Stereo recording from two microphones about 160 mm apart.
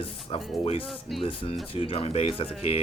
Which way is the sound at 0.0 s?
35° left (ahead or behind).